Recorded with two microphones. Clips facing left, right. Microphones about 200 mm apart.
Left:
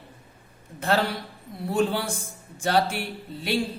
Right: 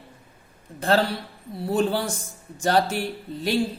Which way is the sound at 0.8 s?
35° right (ahead or behind).